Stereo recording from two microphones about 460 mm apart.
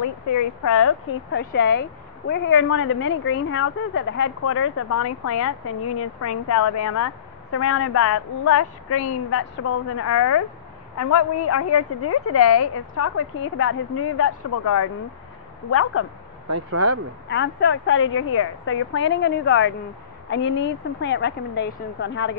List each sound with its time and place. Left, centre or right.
0.0 s a woman's voice: left
8.9 s a woman's voice: left
9.3 s a woman's voice: left
16.4 s speech: right
17.3 s speech: left